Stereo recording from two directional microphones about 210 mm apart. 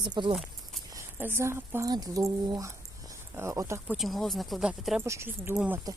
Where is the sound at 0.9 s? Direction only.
10° right (ahead or behind).